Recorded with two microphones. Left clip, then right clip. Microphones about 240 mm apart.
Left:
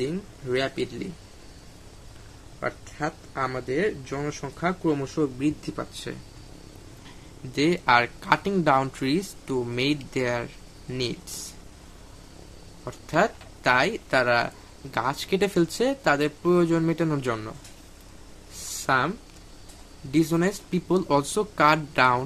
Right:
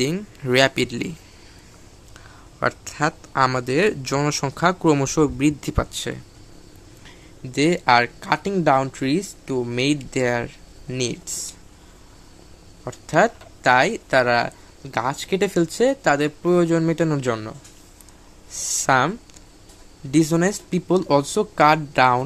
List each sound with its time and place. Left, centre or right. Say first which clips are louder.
0.0 s speech: right 6 dB; right
2.6 s speech: right 8 dB; right
7.5 s speech: right 4 dB; centre
12.8 s speech: right 5 dB; centre